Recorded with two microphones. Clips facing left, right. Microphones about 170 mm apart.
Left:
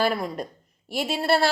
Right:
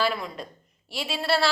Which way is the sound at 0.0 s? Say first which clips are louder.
Left 3 dB; 45° left (ahead or behind).